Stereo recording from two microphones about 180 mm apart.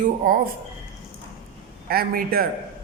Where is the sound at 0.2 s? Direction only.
50° right (ahead or behind).